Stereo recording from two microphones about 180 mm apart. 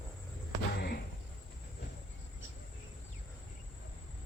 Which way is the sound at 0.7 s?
60° left (ahead or behind).